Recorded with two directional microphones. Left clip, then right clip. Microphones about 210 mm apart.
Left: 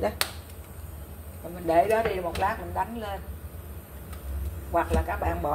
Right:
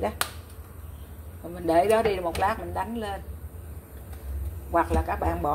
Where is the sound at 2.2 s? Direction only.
30° right (ahead or behind).